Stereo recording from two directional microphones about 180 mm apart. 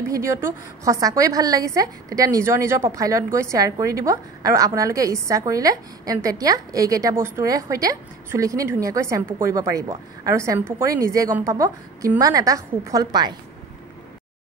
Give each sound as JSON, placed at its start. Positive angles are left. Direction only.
{"t": 0.1, "sound": "a woman's voice", "side_deg": -15}